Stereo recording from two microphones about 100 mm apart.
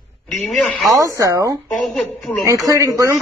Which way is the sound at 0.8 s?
35° right (ahead or behind).